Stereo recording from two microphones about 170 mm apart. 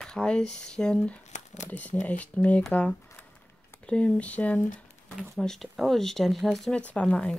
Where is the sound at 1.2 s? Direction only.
45° left (ahead or behind).